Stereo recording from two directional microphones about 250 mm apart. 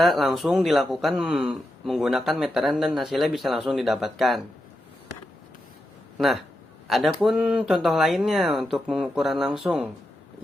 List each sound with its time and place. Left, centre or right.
0.0 s speech: centre
6.1 s speech: centre